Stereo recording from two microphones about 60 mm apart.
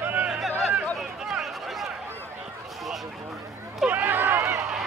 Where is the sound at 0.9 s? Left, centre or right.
Centre.